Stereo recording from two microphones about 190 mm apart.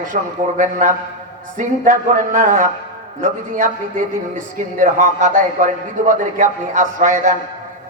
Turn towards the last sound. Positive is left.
turn(degrees=-40)  # may be behind; listen again after turning